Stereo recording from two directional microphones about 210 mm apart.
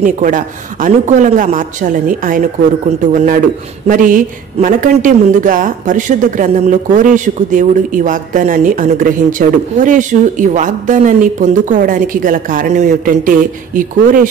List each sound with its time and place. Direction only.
0.0 s speech: 40° right (ahead or behind)